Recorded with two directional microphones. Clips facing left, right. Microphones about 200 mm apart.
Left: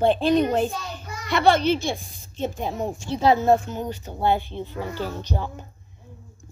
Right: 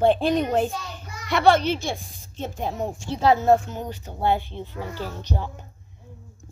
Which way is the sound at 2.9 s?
5° right (ahead or behind).